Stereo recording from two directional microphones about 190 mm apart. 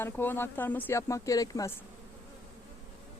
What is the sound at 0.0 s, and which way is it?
Speech, 10° left (ahead or behind).